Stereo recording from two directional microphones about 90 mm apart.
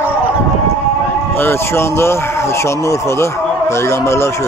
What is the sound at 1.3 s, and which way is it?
Speech, 25° left (ahead or behind).